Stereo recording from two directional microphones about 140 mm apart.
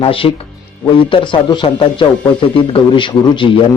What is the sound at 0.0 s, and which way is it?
Speech, 40° left (ahead or behind).